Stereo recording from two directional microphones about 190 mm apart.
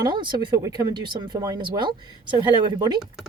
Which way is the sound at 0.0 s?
20° right (ahead or behind).